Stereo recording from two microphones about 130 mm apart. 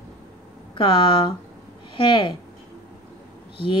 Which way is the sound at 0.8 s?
40° left (ahead or behind).